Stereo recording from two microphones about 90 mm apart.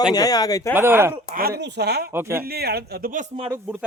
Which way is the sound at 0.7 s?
25° right (ahead or behind).